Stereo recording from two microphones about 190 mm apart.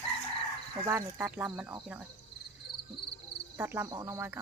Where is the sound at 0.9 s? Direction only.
10° right (ahead or behind).